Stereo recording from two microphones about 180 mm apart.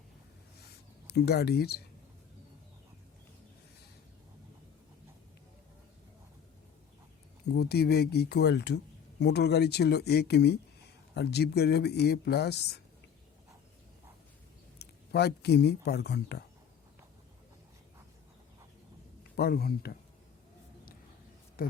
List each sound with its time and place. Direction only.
1.0 s speech: 65° left (ahead or behind)
7.4 s speech: 65° left (ahead or behind)
14.8 s speech: 65° left (ahead or behind)
19.4 s speech: 60° left (ahead or behind)
21.6 s speech: 55° left (ahead or behind)